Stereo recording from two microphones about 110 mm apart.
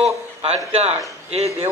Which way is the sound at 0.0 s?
65° right (ahead or behind).